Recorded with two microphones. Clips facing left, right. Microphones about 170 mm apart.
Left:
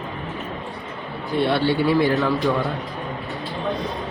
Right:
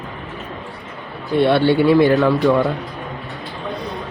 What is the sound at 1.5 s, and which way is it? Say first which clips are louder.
Speech: right 6 dB; 60° right (ahead or behind).